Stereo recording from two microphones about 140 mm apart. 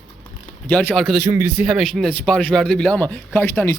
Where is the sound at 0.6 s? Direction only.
5° left (ahead or behind).